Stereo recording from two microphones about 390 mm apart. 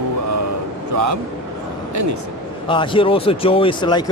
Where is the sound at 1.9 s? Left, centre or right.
Right.